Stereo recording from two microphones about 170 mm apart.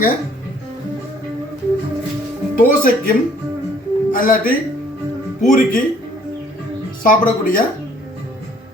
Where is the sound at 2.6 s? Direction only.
55° left (ahead or behind).